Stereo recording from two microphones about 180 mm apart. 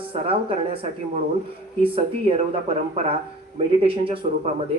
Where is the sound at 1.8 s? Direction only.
30° right (ahead or behind).